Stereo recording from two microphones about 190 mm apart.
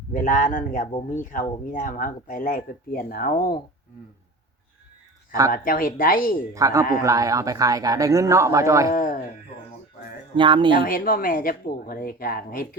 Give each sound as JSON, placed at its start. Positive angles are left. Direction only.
{"t": 0.1, "sound": "speech", "side_deg": 45}
{"t": 5.5, "sound": "speech", "side_deg": 50}
{"t": 6.5, "sound": "speech", "side_deg": -15}
{"t": 8.9, "sound": "speech", "side_deg": 45}
{"t": 10.3, "sound": "speech", "side_deg": -25}
{"t": 10.8, "sound": "speech", "side_deg": 50}